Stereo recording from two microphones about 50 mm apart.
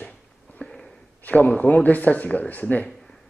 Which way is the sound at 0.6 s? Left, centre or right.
Centre.